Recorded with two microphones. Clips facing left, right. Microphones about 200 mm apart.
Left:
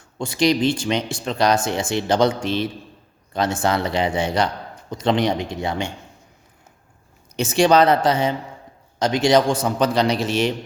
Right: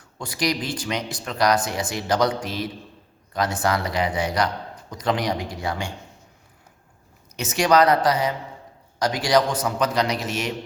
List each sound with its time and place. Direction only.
0.2 s speech: 25° left (ahead or behind)
7.3 s speech: 30° left (ahead or behind)